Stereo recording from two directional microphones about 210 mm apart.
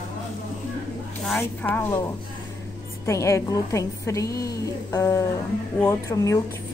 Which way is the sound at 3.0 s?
15° left (ahead or behind).